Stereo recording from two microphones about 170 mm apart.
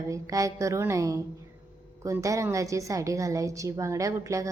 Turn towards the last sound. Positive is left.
turn(degrees=-20)  # may be behind; listen again after turning